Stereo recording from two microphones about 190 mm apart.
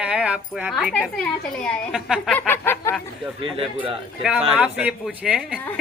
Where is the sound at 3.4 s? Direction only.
25° right (ahead or behind).